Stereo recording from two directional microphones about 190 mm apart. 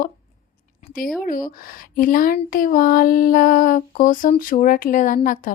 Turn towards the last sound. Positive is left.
turn(degrees=45)  # may be behind; listen again after turning